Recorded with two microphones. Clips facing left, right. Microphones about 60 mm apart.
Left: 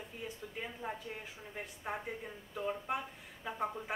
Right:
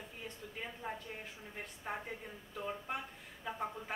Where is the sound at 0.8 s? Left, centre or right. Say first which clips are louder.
Left 1 dB; left.